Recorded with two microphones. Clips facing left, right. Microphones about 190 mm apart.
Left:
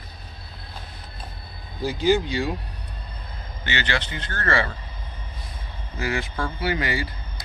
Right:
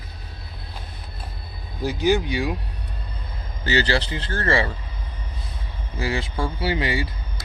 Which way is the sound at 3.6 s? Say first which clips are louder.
Right 6 dB; 35° right (ahead or behind).